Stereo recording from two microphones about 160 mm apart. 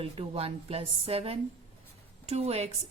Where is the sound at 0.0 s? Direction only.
35° right (ahead or behind).